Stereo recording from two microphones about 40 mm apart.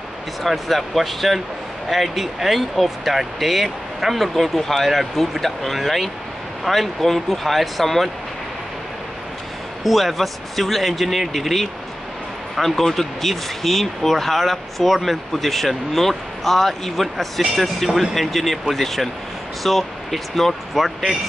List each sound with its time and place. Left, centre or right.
0.4 s speech: centre
9.8 s speech: centre